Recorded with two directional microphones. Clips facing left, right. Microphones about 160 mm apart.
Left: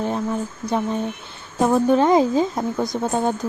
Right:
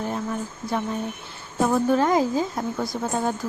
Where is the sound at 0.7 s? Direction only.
20° left (ahead or behind).